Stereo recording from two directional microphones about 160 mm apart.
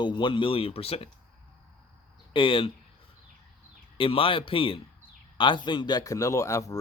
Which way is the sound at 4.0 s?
35° left (ahead or behind).